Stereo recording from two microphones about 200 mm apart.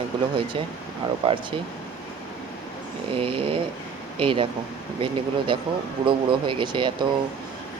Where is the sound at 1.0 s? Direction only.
25° right (ahead or behind).